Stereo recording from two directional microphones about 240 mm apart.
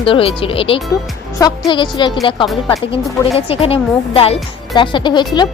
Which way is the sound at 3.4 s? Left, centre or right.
Left.